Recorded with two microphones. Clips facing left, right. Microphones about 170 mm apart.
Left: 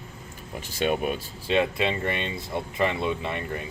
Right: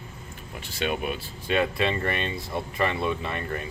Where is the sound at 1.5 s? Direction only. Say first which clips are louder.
Left 1 dB; 20° left (ahead or behind).